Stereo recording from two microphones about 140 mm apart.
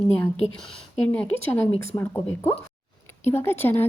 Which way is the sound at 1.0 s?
10° left (ahead or behind).